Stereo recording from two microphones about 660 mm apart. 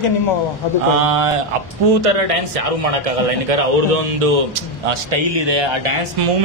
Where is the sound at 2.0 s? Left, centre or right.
Right.